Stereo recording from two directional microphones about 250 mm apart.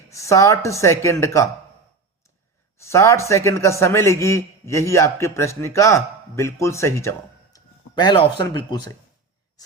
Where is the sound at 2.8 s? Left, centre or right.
Centre.